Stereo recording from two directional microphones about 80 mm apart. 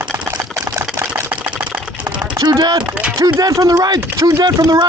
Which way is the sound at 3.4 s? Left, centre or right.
Right.